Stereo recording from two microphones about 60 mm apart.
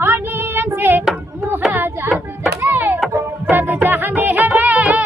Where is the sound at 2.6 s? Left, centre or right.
Right.